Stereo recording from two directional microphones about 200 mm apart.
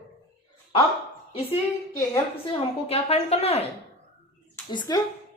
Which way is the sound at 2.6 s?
30° left (ahead or behind).